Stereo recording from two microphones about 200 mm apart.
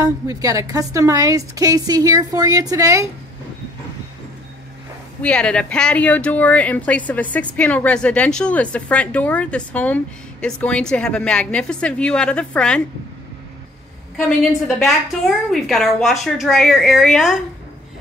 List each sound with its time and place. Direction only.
0.0 s a woman's voice: 15° right (ahead or behind)
5.2 s speech: 5° left (ahead or behind)
14.2 s speech: centre (ahead or behind)